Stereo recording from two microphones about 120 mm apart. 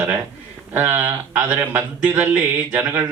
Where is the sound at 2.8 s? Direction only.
30° right (ahead or behind).